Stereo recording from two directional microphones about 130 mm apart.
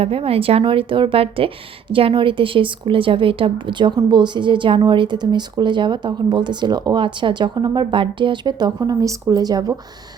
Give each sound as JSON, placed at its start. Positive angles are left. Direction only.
{"t": 0.0, "sound": "a woman's voice", "side_deg": -50}